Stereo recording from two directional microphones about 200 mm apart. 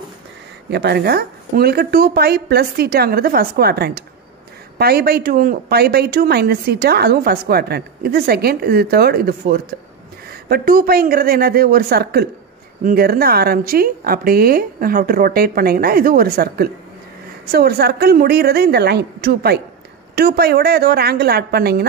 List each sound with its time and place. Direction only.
0.7 s a woman's voice: 55° right (ahead or behind)